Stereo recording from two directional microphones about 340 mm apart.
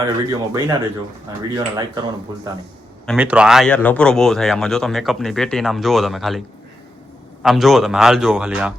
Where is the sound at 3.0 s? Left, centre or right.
Centre.